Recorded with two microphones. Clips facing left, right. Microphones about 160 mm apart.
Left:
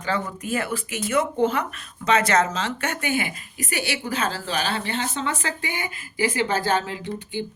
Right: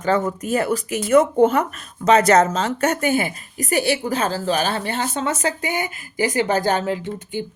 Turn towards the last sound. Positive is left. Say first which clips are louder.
# right 2 dB
turn(degrees=-45)  # may be behind; listen again after turning